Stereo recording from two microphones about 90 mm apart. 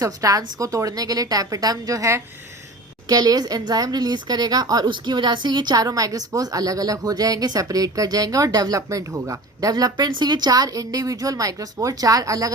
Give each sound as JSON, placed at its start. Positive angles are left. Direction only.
{"t": 0.0, "sound": "a woman's voice", "side_deg": -40}
{"t": 3.1, "sound": "a woman's voice", "side_deg": -45}
{"t": 10.1, "sound": "a woman's voice", "side_deg": -55}